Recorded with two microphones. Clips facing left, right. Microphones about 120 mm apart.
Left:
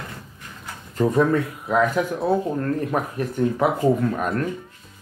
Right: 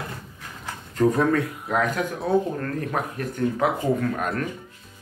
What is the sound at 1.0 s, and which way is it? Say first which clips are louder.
Speech: left 1 dB; 5° left (ahead or behind).